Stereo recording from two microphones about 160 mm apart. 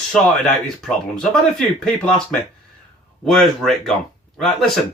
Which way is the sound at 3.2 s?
Centre (ahead or behind).